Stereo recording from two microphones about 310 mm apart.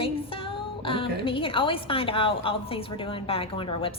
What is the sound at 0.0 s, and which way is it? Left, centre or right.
A woman's voice, centre.